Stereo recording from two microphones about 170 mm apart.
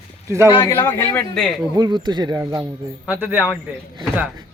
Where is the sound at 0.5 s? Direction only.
25° left (ahead or behind).